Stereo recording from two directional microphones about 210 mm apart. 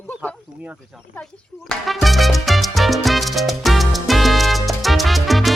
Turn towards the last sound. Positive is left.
turn(degrees=0)  # may be behind; listen again after turning